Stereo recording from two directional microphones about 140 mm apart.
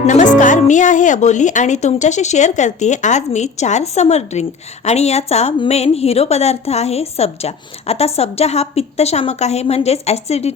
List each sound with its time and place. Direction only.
0.1 s a woman's voice: 65° left (ahead or behind)